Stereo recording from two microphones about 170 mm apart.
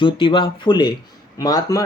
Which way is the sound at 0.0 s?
30° left (ahead or behind).